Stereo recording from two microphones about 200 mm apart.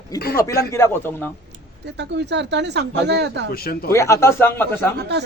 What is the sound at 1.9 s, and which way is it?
Speech, 60° right (ahead or behind).